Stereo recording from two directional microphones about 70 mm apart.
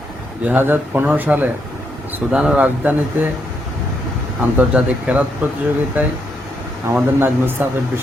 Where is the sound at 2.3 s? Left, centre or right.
Centre.